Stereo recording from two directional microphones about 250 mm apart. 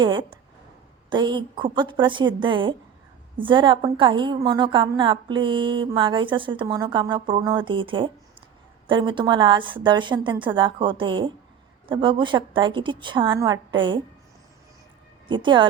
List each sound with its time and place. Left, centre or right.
0.0 s a woman's voice: centre
15.3 s a woman's voice: centre